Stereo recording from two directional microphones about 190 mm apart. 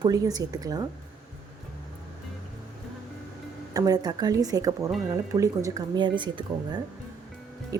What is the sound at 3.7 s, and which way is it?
A woman's voice, 20° right (ahead or behind).